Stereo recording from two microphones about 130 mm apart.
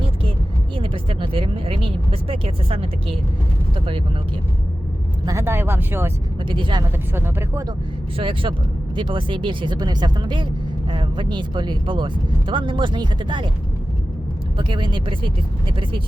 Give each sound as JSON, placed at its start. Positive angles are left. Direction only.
{"t": 0.8, "sound": "vehicle", "side_deg": -40}
{"t": 5.2, "sound": "speech", "side_deg": -20}
{"t": 6.5, "sound": "speech", "side_deg": -40}
{"t": 7.1, "sound": "speech", "side_deg": -15}
{"t": 8.2, "sound": "speech", "side_deg": -40}
{"t": 14.6, "sound": "speech", "side_deg": -40}